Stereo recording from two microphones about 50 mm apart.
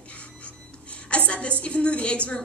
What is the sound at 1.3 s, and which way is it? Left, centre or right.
A woman's voice, left.